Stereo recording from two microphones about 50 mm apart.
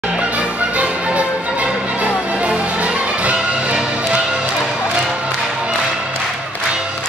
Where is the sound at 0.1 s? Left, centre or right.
Right.